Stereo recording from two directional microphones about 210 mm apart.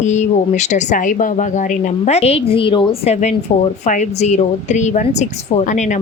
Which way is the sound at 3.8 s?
35° left (ahead or behind).